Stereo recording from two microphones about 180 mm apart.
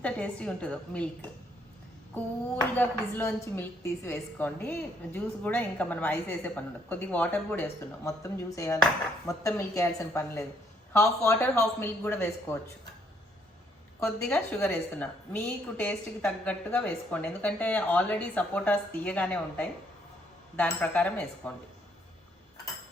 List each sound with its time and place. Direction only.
0.0 s a woman's voice: 5° left (ahead or behind)
2.7 s a woman's voice: 10° left (ahead or behind)
14.0 s a woman's voice: 10° left (ahead or behind)